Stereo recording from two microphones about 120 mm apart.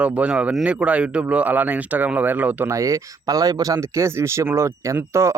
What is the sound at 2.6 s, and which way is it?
Speech, 25° right (ahead or behind).